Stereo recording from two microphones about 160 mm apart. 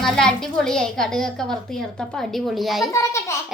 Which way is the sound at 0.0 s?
5° left (ahead or behind).